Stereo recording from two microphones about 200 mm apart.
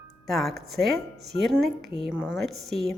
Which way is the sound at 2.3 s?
Centre (ahead or behind).